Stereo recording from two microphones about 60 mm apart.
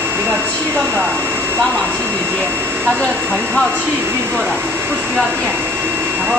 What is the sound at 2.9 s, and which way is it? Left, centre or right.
Speech, centre.